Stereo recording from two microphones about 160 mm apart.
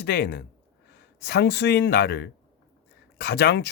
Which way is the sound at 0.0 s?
85° left.